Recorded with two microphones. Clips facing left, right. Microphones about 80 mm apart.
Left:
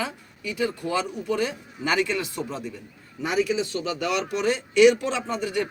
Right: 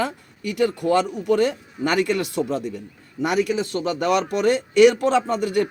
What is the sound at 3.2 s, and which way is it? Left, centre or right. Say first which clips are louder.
A man's voice: right 3 dB; right.